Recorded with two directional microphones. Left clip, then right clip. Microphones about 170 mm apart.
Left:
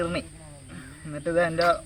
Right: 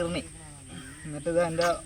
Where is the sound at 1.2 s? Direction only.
5° right (ahead or behind).